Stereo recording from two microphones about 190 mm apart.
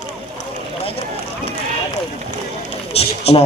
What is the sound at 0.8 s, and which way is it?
Run, 30° left (ahead or behind).